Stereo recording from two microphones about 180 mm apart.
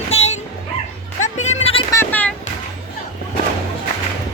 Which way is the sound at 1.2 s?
40° left (ahead or behind).